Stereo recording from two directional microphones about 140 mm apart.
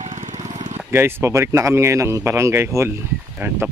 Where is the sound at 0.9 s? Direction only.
15° right (ahead or behind).